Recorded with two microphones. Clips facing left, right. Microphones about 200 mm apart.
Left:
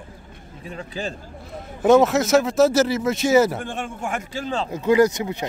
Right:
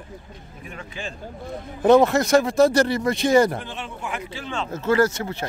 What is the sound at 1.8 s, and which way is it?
Speech, centre (ahead or behind).